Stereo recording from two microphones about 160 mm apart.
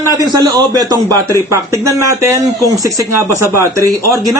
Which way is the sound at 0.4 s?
20° right (ahead or behind).